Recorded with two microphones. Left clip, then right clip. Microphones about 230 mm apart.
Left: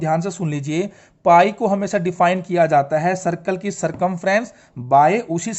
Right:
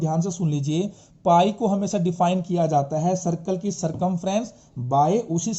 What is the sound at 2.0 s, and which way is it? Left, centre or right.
Speech, left.